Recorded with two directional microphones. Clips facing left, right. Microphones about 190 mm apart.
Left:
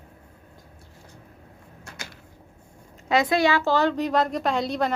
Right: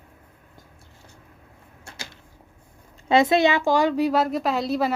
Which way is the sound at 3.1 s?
25° right (ahead or behind).